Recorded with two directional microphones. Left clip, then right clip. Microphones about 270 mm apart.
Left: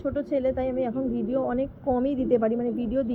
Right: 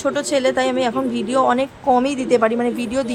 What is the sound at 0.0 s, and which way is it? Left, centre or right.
Speech, centre.